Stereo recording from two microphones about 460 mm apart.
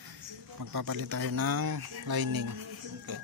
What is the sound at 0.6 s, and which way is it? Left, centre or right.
Speech, right.